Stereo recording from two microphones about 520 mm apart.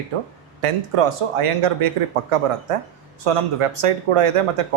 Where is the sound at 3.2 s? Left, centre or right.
Right.